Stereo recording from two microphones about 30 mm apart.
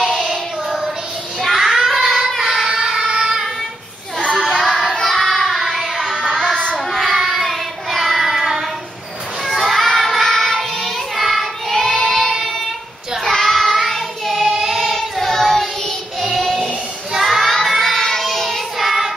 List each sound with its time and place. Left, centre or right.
1.5 s child singing: centre
2.8 s singing: centre
4.2 s child singing: left
5.0 s child singing: centre
6.2 s child singing: centre
7.1 s child singing: centre
9.5 s child singing: centre
13.2 s child singing: centre
15.0 s child singing: centre
18.8 s child singing: centre